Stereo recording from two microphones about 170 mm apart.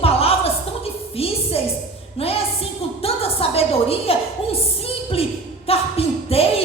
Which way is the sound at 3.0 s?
35° left (ahead or behind).